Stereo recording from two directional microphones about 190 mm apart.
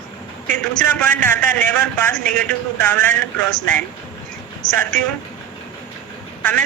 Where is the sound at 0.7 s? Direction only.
10° left (ahead or behind).